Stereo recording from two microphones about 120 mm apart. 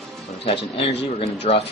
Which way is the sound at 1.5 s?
65° left (ahead or behind).